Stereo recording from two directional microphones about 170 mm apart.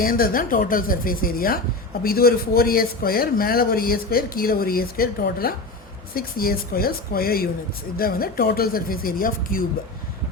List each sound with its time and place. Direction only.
0.0 s a man's voice: 55° left (ahead or behind)